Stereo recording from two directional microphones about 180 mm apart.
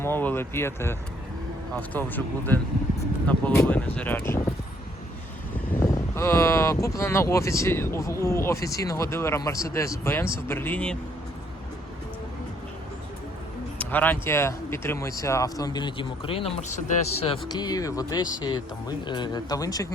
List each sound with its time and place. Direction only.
0.0 s speech: 10° left (ahead or behind)
5.8 s speech: 15° left (ahead or behind)
13.7 s speech: 10° left (ahead or behind); by 17.4 s 30° left (ahead or behind)
17.5 s speech: 20° left (ahead or behind)